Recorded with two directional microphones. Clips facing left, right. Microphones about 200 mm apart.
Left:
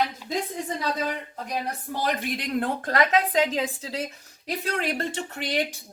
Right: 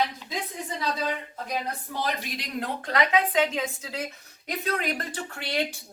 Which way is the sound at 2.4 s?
50° left (ahead or behind).